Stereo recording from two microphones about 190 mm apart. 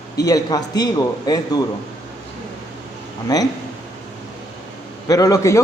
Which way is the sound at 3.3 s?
20° left (ahead or behind).